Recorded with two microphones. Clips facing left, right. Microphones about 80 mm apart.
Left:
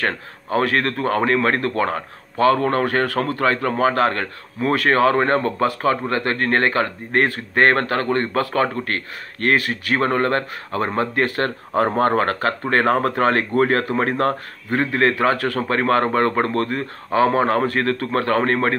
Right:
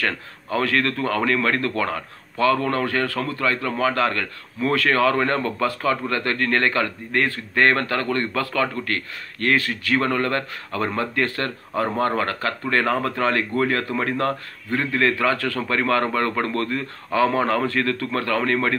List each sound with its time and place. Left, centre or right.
0.0 s a man's voice: left
11.3 s a man's voice: left